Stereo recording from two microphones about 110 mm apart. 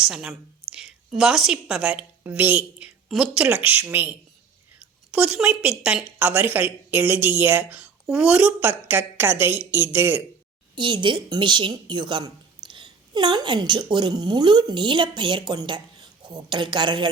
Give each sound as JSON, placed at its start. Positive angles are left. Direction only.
{"t": 0.0, "sound": "a woman's voice", "side_deg": -5}
{"t": 5.1, "sound": "a woman's voice", "side_deg": -10}
{"t": 10.8, "sound": "a woman's voice", "side_deg": -45}